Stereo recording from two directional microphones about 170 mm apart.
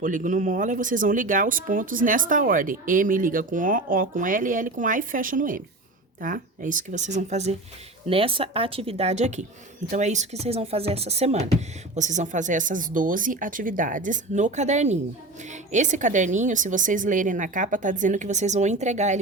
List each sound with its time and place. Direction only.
0.0 s speech: 50° right (ahead or behind)